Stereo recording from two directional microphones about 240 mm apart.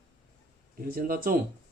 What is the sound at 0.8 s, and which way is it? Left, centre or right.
Speech, right.